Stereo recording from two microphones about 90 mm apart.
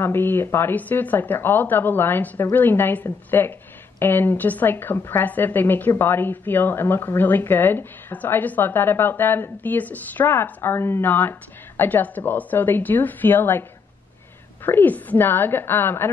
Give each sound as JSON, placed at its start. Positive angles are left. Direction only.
{"t": 0.0, "sound": "a woman's voice", "side_deg": 25}